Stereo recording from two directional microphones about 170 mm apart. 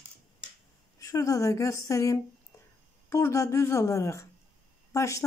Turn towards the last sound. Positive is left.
turn(degrees=20)  # may be behind; listen again after turning